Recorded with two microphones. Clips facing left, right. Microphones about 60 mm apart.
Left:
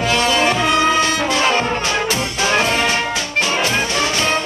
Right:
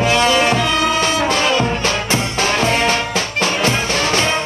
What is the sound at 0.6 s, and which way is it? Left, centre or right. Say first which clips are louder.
Music: left 1 dB; left.